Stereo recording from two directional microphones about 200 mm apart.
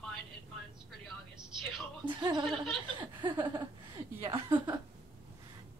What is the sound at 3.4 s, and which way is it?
Speech, 20° right (ahead or behind).